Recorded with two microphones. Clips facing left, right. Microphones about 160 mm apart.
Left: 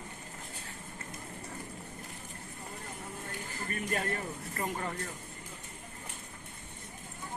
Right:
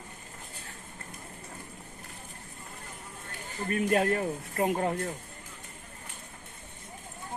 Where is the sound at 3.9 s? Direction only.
65° right (ahead or behind).